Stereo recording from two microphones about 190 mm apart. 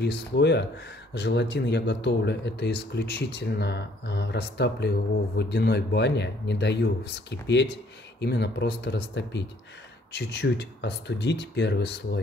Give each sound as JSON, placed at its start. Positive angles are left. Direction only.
{"t": 0.0, "sound": "speech", "side_deg": 60}